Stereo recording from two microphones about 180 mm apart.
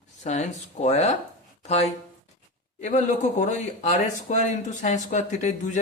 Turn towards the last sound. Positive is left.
turn(degrees=45)  # may be behind; listen again after turning